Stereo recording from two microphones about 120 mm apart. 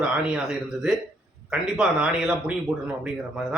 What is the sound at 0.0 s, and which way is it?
Speech, 5° right (ahead or behind).